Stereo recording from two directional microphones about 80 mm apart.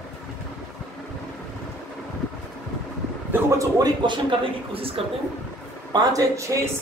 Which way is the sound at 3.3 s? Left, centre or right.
Right.